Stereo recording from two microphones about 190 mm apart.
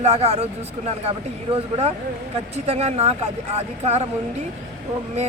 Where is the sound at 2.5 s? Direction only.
35° right (ahead or behind).